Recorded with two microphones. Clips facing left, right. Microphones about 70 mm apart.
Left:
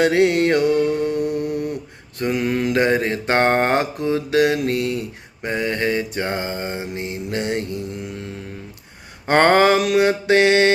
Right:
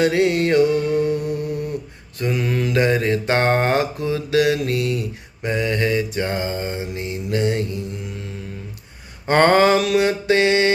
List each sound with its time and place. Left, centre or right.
0.0 s mantra: left
2.1 s mantra: left
9.2 s mantra: left